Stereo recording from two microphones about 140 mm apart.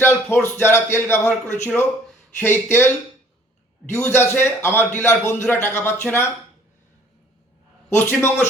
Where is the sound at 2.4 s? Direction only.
15° left (ahead or behind).